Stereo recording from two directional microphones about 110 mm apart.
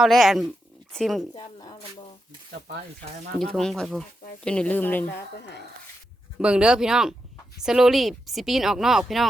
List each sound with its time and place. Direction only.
0.0 s speech: centre (ahead or behind)
1.3 s a sound: 40° left (ahead or behind)
3.3 s speech: 5° left (ahead or behind)
6.4 s speech: 10° right (ahead or behind)